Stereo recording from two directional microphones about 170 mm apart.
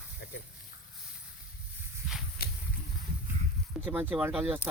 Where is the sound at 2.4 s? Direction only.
65° left (ahead or behind).